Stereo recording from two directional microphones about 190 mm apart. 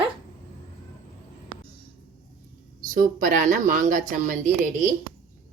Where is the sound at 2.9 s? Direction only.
45° right (ahead or behind).